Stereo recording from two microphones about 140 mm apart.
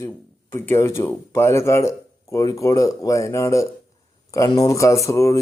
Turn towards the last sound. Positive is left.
turn(degrees=20)  # may be behind; listen again after turning